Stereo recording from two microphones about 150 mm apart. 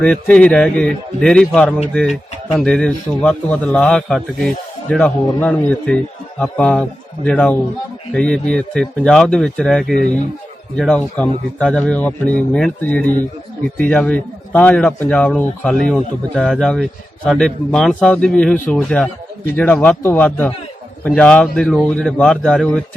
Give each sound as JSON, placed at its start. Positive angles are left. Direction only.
{"t": 0.0, "sound": "a man's voice", "side_deg": 10}